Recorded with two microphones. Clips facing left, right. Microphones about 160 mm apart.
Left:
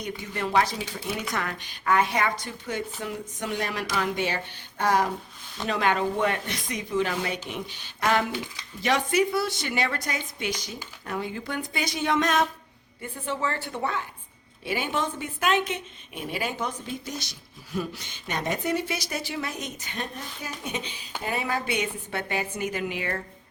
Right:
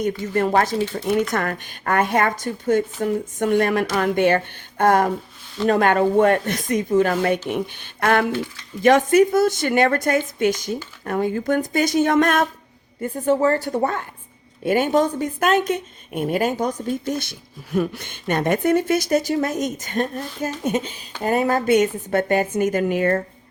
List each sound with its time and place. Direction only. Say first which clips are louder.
0.3 s a woman's voice: right 6 dB; 50° right (ahead or behind)